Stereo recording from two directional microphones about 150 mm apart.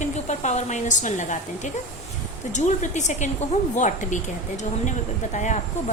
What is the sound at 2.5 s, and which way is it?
A woman's voice, 50° left (ahead or behind).